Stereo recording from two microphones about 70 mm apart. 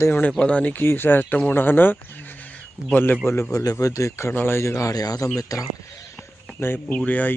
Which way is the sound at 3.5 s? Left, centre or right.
Left.